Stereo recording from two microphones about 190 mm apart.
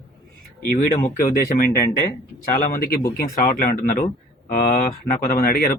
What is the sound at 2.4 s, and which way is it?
Speech, 45° left (ahead or behind).